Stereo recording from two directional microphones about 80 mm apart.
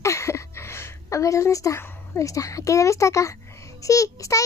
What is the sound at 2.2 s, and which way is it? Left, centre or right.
A child's voice, left.